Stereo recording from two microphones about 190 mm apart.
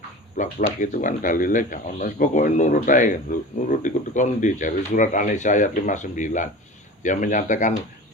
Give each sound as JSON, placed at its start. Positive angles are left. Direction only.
{"t": 0.3, "sound": "speech", "side_deg": 40}